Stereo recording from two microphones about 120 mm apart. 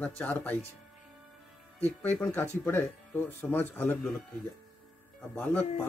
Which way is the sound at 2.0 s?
15° left (ahead or behind).